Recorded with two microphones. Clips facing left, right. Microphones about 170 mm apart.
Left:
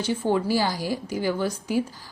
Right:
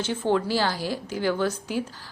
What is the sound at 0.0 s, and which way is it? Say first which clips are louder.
A woman's voice: left 1 dB; 10° left (ahead or behind).